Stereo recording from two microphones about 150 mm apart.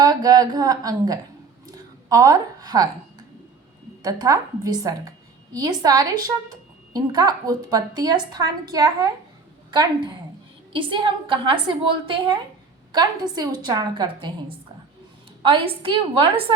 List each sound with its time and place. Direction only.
0.0 s speech: 25° right (ahead or behind)
1.7 s a sound: 25° right (ahead or behind)
4.0 s a woman's voice: 25° right (ahead or behind)